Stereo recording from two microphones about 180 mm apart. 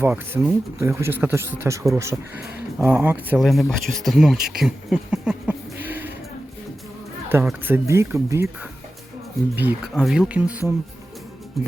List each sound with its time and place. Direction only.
0.0 s speech: 10° right (ahead or behind)
4.6 s a sound: 5° right (ahead or behind)
7.4 s speech: 10° right (ahead or behind)
9.6 s speech: 10° right (ahead or behind)
11.6 s music: centre (ahead or behind)